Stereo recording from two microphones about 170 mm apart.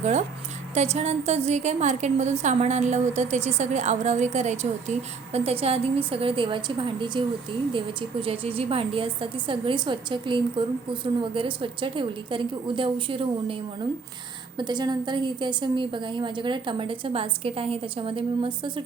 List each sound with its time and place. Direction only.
0.0 s a woman's voice: 45° right (ahead or behind)
14.6 s a woman's voice: 25° right (ahead or behind)